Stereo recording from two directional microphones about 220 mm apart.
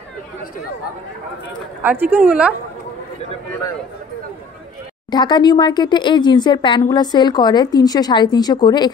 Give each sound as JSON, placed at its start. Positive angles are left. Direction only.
{"t": 1.8, "sound": "speech", "side_deg": -10}
{"t": 5.1, "sound": "speech", "side_deg": 20}